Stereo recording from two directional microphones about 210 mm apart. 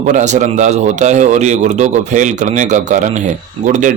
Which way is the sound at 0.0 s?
35° right (ahead or behind).